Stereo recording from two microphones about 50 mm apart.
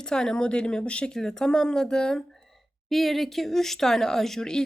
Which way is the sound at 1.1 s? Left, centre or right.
Centre.